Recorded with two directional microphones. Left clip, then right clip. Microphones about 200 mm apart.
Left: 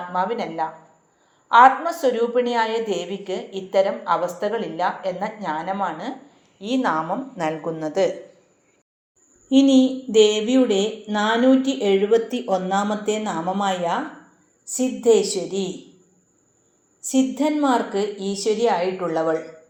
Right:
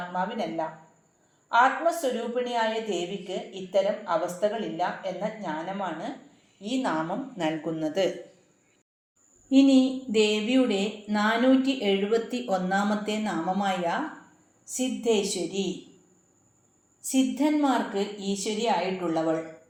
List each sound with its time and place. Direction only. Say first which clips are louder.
0.1 s a woman's voice: left 8 dB; 25° left (ahead or behind)
9.5 s a woman's voice: left 4 dB; 20° left (ahead or behind)
17.0 s a woman's voice: left 5 dB; 30° left (ahead or behind)